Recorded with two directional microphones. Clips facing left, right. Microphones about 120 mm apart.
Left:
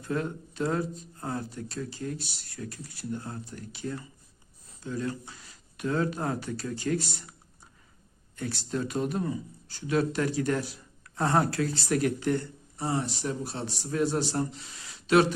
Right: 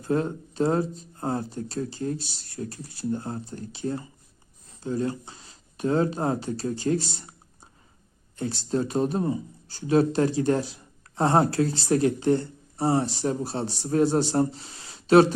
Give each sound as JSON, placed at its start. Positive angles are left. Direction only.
{"t": 0.0, "sound": "speech", "side_deg": -30}